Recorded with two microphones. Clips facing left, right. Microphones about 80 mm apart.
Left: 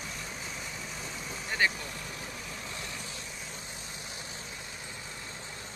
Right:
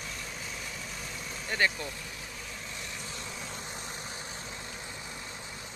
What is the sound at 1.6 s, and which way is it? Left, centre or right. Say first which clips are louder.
Speech: even; centre.